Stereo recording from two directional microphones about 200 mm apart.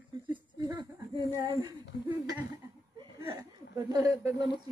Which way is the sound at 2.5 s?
15° right (ahead or behind).